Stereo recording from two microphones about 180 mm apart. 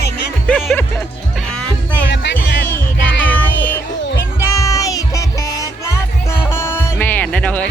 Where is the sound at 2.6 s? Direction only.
10° left (ahead or behind).